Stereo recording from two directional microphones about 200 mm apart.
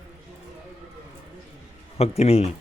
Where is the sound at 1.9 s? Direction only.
30° left (ahead or behind).